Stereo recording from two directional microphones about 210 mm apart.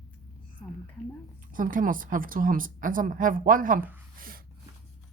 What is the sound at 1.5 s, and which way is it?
A woman's voice, 40° right (ahead or behind).